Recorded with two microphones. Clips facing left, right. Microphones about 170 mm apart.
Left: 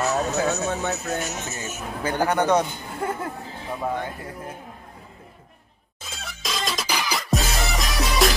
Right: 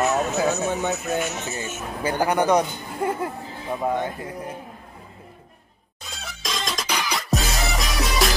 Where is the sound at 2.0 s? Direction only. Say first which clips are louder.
Right 1 dB; 10° right (ahead or behind).